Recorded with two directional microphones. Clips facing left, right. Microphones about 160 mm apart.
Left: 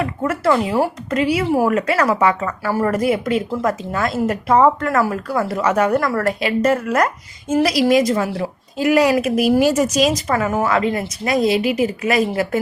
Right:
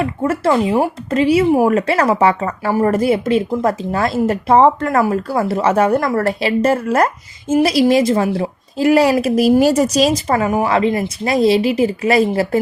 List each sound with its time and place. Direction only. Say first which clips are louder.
0.0 s a woman's voice: right 2 dB; 25° right (ahead or behind)